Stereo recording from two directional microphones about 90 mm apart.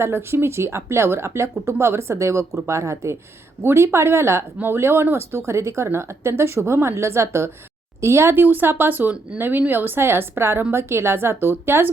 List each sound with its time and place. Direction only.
0.0 s speech: 30° right (ahead or behind)